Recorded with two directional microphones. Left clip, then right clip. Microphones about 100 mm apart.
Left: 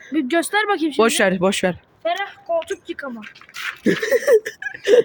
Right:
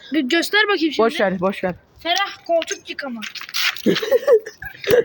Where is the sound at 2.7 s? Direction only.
65° left (ahead or behind).